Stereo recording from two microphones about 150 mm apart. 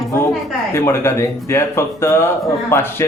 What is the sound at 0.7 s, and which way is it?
A man's voice, 15° left (ahead or behind).